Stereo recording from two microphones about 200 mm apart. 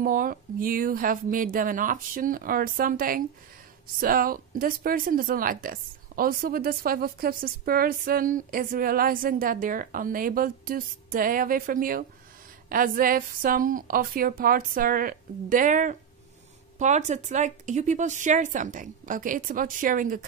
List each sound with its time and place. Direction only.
0.0 s speech: 45° right (ahead or behind)